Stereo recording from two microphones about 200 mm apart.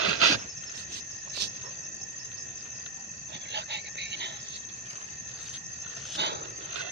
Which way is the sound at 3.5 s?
60° right (ahead or behind).